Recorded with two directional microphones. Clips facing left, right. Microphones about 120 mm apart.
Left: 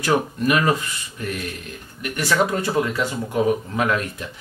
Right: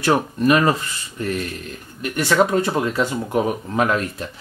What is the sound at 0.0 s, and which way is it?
Speech, 35° right (ahead or behind).